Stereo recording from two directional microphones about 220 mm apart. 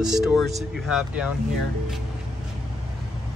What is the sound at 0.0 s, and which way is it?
Speech, centre (ahead or behind).